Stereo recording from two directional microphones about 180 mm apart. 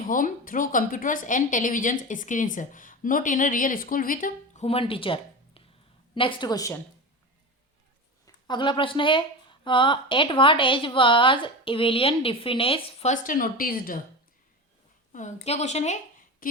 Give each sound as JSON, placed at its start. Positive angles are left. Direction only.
{"t": 0.1, "sound": "a woman's voice", "side_deg": 50}
{"t": 4.6, "sound": "a woman's voice", "side_deg": 30}
{"t": 8.4, "sound": "a woman's voice", "side_deg": 25}
{"t": 15.1, "sound": "a woman's voice", "side_deg": 40}
{"t": 16.4, "sound": "a woman's voice", "side_deg": 50}